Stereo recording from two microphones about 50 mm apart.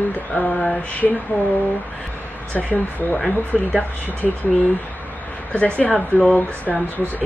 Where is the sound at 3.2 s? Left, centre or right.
Centre.